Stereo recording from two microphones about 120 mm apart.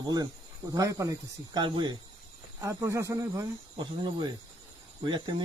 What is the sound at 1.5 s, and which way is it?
Speech, 40° right (ahead or behind).